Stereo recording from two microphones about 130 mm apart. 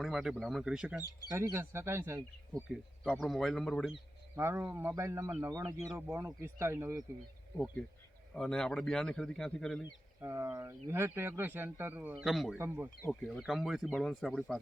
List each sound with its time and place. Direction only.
0.0 s speech: centre (ahead or behind)
1.3 s speech: 20° right (ahead or behind)
2.7 s speech: centre (ahead or behind)
4.4 s speech: 15° right (ahead or behind)
5.6 s speech: 10° right (ahead or behind)
6.1 s speech: 20° right (ahead or behind)
8.4 s speech: 5° left (ahead or behind)
10.2 s speech: 20° right (ahead or behind)
12.2 s speech: centre (ahead or behind)
12.5 s speech: 15° right (ahead or behind)
13.1 s speech: centre (ahead or behind)